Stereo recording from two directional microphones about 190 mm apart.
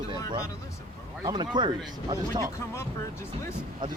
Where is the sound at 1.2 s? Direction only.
25° right (ahead or behind).